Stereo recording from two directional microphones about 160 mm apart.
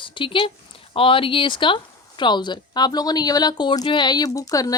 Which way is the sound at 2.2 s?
30° left (ahead or behind).